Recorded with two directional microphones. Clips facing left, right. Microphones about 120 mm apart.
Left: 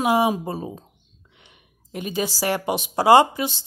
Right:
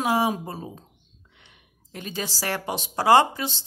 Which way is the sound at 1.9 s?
15° left (ahead or behind).